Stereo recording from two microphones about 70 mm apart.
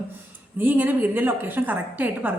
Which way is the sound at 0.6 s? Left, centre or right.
Right.